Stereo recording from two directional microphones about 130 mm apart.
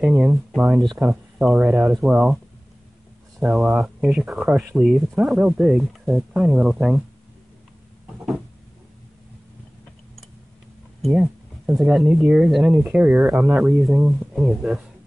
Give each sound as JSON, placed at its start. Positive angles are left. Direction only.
{"t": 0.0, "sound": "speech", "side_deg": -5}
{"t": 11.7, "sound": "speech", "side_deg": 0}